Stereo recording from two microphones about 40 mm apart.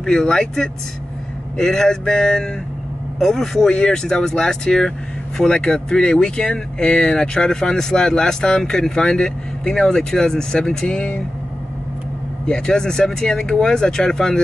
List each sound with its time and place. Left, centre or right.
0.0 s speech: centre
12.4 s speech: centre